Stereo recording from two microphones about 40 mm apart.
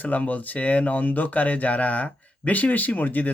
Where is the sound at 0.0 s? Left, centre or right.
Left.